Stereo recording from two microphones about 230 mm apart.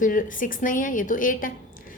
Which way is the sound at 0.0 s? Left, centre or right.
Left.